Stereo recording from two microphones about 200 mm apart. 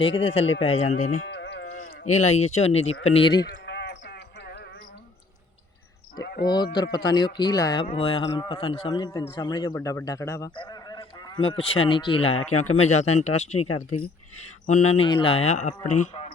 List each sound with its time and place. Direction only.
0.3 s a man's voice: 30° left (ahead or behind)
1.3 s sheep: 60° left (ahead or behind)
2.0 s a man's voice: 35° left (ahead or behind)
3.4 s a sound: 60° left (ahead or behind)
6.2 s speech: 50° left (ahead or behind)
6.7 s a man's voice: 20° left (ahead or behind)
14.7 s speech: 35° left (ahead or behind)